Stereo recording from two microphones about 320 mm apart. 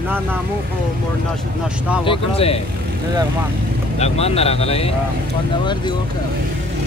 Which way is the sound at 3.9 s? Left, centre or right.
Centre.